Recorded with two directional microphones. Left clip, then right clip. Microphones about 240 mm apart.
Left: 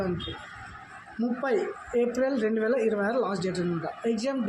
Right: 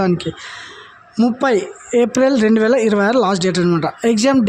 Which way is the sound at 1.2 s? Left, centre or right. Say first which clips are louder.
Right 12 dB; right.